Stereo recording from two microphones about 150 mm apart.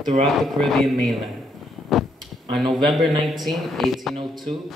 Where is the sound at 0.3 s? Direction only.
Centre (ahead or behind).